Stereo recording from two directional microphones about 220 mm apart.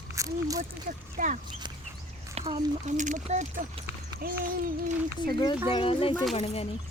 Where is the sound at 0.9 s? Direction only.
35° right (ahead or behind).